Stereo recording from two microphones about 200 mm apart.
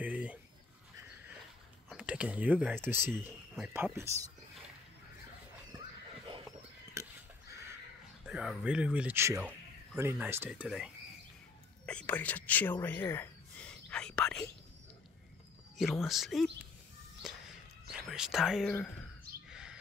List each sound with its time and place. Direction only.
0.0 s a sound: 5° right (ahead or behind)
1.9 s speech: 5° right (ahead or behind)
7.0 s a sound: 15° right (ahead or behind)
8.3 s speech: 5° right (ahead or behind)
15.8 s speech: centre (ahead or behind)
18.1 s speech: centre (ahead or behind)
19.5 s chirp: 5° right (ahead or behind)